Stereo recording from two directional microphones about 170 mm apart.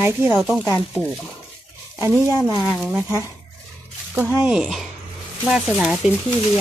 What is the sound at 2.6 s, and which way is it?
Speech, 5° right (ahead or behind).